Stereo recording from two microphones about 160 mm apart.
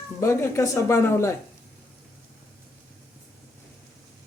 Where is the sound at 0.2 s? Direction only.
15° left (ahead or behind).